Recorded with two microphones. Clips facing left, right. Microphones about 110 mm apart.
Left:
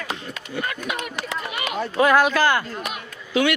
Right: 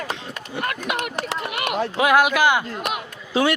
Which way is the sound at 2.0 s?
10° right (ahead or behind).